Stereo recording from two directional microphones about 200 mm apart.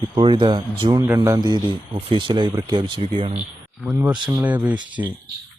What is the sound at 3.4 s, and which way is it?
Speech, 5° right (ahead or behind).